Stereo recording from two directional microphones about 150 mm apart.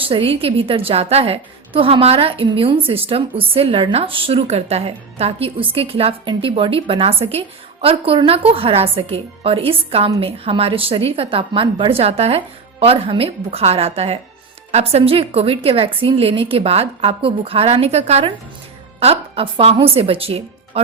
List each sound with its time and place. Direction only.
0.0 s a woman's voice: 35° right (ahead or behind)